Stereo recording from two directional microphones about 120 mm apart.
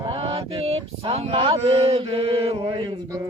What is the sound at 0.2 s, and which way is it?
Mantra, 55° right (ahead or behind).